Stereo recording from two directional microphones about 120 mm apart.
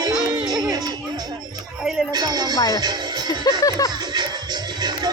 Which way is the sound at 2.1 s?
35° right (ahead or behind).